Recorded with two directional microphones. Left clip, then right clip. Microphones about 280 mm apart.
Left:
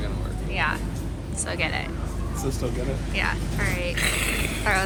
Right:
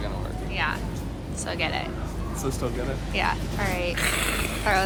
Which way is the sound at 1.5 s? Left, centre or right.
Centre.